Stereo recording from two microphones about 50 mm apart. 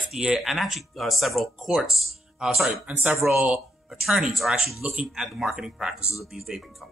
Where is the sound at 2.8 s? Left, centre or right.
Right.